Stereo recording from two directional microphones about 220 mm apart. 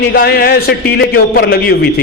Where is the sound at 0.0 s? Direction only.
45° left (ahead or behind).